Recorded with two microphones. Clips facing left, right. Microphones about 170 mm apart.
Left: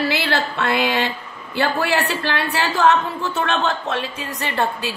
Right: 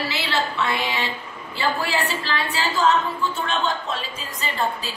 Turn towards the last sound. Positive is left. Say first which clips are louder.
# left 3 dB
turn(degrees=70)  # may be behind; listen again after turning